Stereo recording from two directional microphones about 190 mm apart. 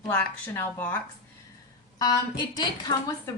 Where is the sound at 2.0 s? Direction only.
20° left (ahead or behind).